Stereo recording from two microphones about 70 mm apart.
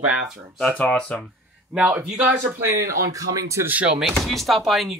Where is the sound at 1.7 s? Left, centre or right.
Centre.